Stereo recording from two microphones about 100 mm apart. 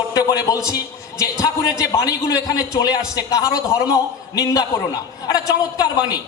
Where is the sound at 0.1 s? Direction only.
35° left (ahead or behind).